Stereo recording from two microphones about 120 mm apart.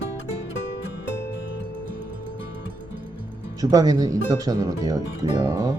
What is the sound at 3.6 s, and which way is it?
Speech, 30° right (ahead or behind).